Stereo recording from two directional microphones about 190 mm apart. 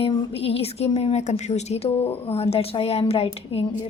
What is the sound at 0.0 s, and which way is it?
A woman's voice, 30° left (ahead or behind).